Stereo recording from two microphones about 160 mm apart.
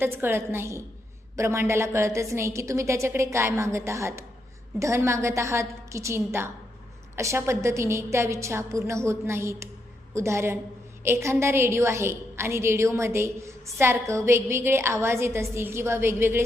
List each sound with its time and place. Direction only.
0.0 s a woman's voice: 15° right (ahead or behind)